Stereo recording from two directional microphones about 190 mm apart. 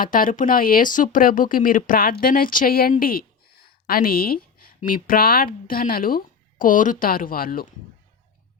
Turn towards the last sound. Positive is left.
turn(degrees=50)  # may be behind; listen again after turning